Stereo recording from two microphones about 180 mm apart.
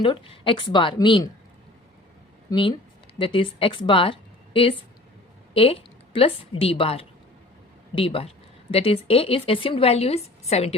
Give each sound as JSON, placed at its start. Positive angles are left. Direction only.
{"t": 0.0, "sound": "a woman's voice", "side_deg": 30}
{"t": 2.5, "sound": "a woman's voice", "side_deg": 25}